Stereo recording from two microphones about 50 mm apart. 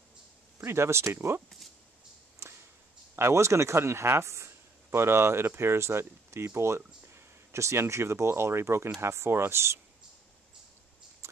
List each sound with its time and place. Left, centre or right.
0.6 s speech: right
2.4 s a sound: right
3.2 s speech: right